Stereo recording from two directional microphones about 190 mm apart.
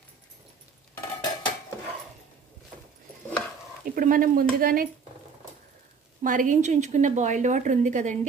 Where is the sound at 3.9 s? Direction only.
45° right (ahead or behind).